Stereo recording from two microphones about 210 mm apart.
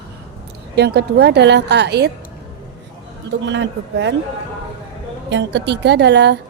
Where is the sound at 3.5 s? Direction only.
55° right (ahead or behind).